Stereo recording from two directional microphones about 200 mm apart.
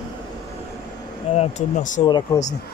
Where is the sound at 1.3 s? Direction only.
35° left (ahead or behind).